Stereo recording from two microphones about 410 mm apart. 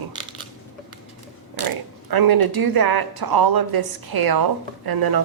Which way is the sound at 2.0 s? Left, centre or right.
Right.